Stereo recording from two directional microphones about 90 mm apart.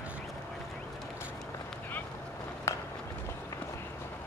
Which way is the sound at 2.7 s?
35° left (ahead or behind).